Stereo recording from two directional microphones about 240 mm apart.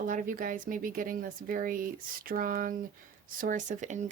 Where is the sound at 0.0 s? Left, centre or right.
Right.